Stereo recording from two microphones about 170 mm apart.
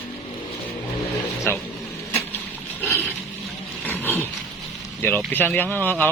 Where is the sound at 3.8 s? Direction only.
10° left (ahead or behind).